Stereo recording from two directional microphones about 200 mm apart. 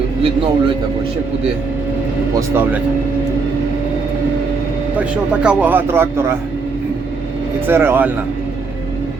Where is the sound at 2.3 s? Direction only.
10° right (ahead or behind).